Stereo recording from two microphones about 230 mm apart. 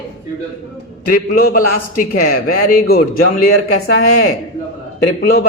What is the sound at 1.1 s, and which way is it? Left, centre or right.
Speech, left.